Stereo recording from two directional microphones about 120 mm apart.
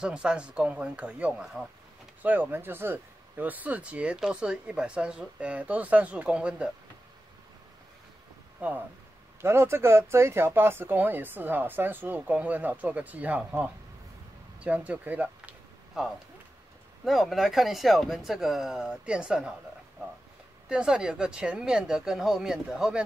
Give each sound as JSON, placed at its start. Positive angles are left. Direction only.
{"t": 0.0, "sound": "speech", "side_deg": -10}
{"t": 2.2, "sound": "speech", "side_deg": -15}
{"t": 8.5, "sound": "speech", "side_deg": -15}
{"t": 17.0, "sound": "speech", "side_deg": 0}
{"t": 20.6, "sound": "speech", "side_deg": -5}